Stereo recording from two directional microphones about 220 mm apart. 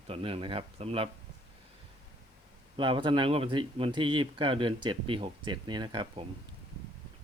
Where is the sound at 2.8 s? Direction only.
20° right (ahead or behind).